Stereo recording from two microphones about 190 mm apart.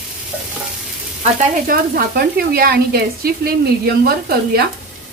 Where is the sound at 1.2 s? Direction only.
40° right (ahead or behind).